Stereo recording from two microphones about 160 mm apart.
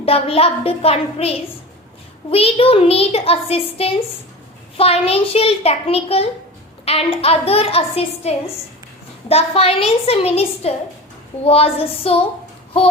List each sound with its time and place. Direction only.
0.0 s a child's voice: 35° left (ahead or behind)